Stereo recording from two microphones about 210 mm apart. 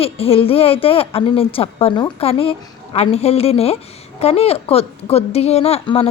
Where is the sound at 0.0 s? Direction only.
25° left (ahead or behind).